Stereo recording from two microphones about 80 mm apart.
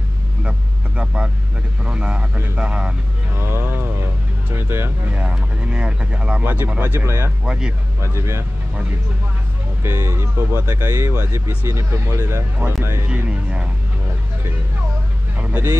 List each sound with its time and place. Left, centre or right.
0.4 s vehicle: centre
1.8 s speech: centre
3.3 s music: right
5.1 s speech: centre
6.4 s speech: right
7.4 s speech: centre
8.0 s speech: right
9.8 s speech: right
13.0 s speech: centre
15.3 s vehicle: centre